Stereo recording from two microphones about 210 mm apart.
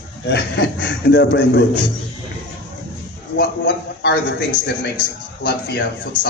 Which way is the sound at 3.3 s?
50° left (ahead or behind).